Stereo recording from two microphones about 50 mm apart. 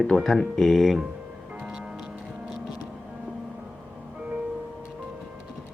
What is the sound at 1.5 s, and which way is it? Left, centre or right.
Music, centre.